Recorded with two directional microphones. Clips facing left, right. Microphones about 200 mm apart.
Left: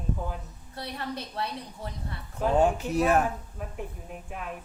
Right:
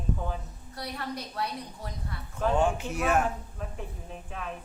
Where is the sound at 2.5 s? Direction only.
35° left (ahead or behind).